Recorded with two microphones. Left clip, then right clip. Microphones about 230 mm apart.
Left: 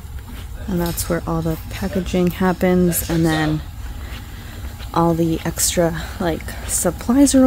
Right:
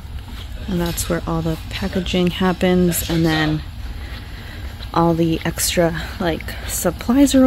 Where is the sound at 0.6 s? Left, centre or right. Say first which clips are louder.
Even; centre.